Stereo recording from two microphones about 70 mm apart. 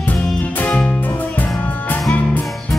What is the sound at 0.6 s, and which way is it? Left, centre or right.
Music, left.